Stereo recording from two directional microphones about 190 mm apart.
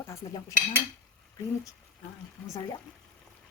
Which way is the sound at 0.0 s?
15° left (ahead or behind).